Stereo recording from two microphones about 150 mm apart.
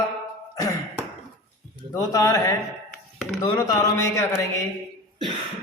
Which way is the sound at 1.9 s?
25° left (ahead or behind).